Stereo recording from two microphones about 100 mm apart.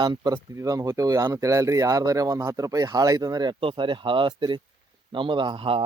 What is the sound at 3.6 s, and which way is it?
Speech, 60° right (ahead or behind).